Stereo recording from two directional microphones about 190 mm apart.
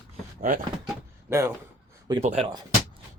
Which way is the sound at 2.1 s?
30° right (ahead or behind).